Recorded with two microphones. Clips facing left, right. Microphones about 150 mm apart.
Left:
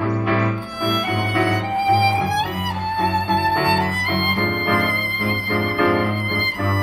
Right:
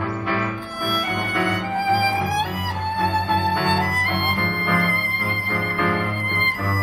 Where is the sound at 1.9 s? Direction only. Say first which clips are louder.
Left 4 dB; 15° left (ahead or behind).